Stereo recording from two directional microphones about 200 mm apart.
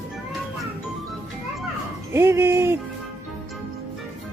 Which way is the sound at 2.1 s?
10° right (ahead or behind).